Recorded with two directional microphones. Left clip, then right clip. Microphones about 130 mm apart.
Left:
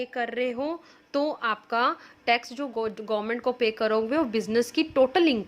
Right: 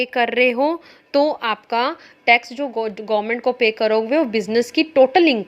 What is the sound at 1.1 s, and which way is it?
A woman's voice, 25° right (ahead or behind).